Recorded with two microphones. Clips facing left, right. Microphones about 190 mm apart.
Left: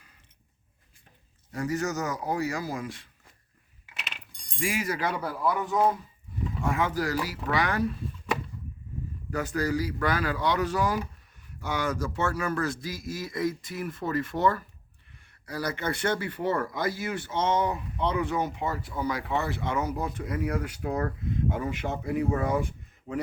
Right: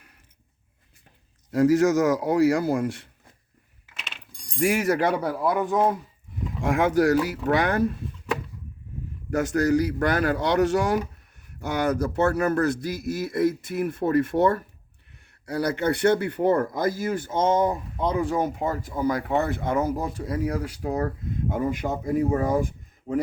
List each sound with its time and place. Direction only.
1.5 s a man's voice: 90° right; by 2.9 s 70° right (ahead or behind)
4.4 s a sound: centre (ahead or behind)
4.6 s speech: 65° right (ahead or behind)
6.6 s speech: 85° right
7.3 s speech: 60° right (ahead or behind)
9.3 s speech: 80° right; by 21.1 s 30° right (ahead or behind)
21.5 s speech: 45° right (ahead or behind)